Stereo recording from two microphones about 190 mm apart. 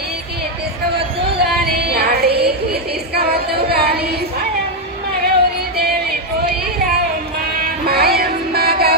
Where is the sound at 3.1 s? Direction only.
55° right (ahead or behind).